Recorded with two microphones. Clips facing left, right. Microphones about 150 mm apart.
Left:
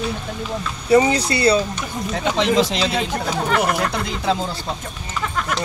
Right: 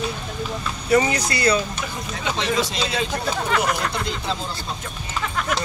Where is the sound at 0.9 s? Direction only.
25° left (ahead or behind).